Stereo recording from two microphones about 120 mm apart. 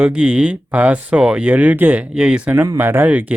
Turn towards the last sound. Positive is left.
turn(degrees=-15)  # may be behind; listen again after turning